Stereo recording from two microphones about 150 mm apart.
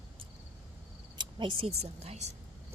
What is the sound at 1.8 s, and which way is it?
Speech, 45° right (ahead or behind).